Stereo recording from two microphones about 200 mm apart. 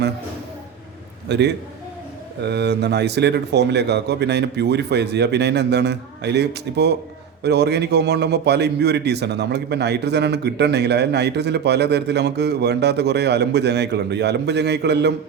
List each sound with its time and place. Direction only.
1.3 s a man's voice: 55° right (ahead or behind)